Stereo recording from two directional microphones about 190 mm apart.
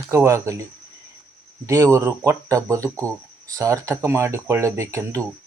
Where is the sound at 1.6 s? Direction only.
15° right (ahead or behind).